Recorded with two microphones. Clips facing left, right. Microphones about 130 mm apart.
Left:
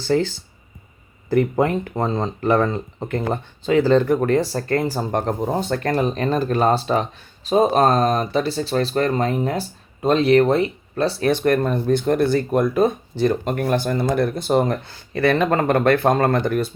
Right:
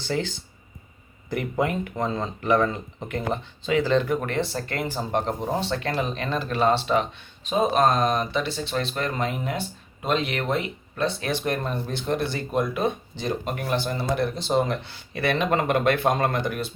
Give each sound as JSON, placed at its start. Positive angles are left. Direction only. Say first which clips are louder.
{"t": 0.1, "sound": "speech", "louder": "left 8 dB", "side_deg": 40}
{"t": 11.2, "sound": "speech", "louder": "left 9 dB", "side_deg": 50}